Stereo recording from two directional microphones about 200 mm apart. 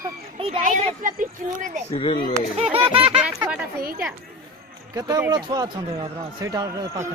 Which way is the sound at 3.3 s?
10° right (ahead or behind).